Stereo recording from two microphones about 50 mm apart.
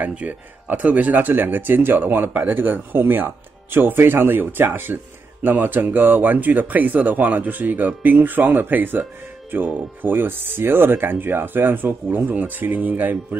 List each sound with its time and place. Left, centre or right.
0.1 s speech: right